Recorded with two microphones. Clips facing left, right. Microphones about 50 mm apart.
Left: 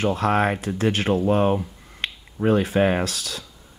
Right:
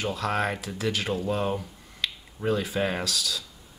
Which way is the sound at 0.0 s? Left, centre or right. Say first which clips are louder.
Left 7 dB; left.